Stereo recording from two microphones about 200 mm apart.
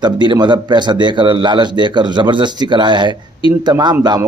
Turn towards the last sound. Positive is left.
turn(degrees=-20)  # may be behind; listen again after turning